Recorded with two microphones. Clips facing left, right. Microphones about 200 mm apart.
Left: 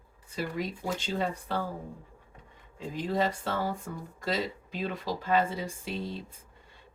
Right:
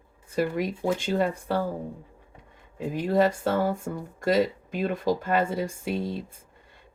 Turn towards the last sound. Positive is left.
turn(degrees=-50)  # may be behind; listen again after turning